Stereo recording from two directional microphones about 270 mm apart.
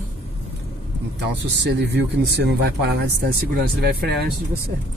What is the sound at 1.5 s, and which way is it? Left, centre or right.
Speech, right.